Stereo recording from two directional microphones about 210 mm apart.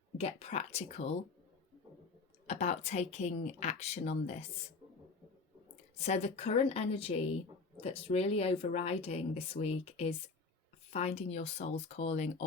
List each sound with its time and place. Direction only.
0.2 s speech: 30° left (ahead or behind)
2.5 s speech: 30° left (ahead or behind)
6.0 s speech: 30° left (ahead or behind)